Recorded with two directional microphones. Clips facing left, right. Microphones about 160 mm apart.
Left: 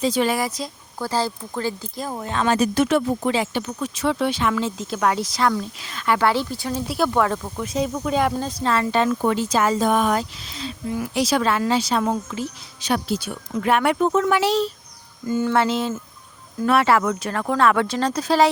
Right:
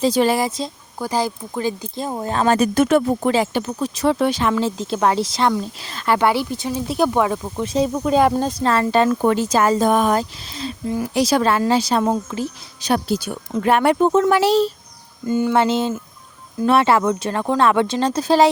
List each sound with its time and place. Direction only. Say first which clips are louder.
0.0 s speech: right 4 dB; 35° right (ahead or behind)
0.9 s speech: right 2 dB; 15° right (ahead or behind)
2.2 s speech: right 4 dB; 35° right (ahead or behind)
2.6 s speech: right 3 dB; 50° right (ahead or behind); by 5.6 s 25° right (ahead or behind)
5.8 s speech: right 2 dB; 35° right (ahead or behind)
6.1 s speech: right 3 dB; 15° right (ahead or behind)
7.6 s speech: right 5 dB; 30° right (ahead or behind)
15.3 s speech: right 3 dB; 20° right (ahead or behind)